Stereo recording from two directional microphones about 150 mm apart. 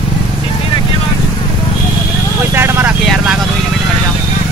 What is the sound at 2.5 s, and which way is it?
Vehicle, 15° right (ahead or behind).